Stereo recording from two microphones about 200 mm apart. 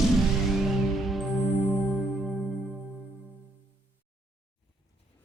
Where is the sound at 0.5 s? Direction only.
Centre (ahead or behind).